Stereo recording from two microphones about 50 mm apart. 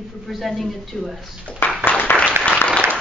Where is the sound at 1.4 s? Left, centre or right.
Left.